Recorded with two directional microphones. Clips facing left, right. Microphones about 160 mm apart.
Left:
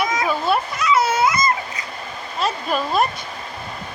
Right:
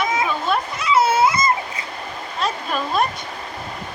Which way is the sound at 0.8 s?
30° right (ahead or behind).